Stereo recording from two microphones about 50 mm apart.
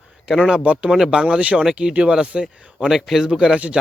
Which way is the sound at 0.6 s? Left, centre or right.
Right.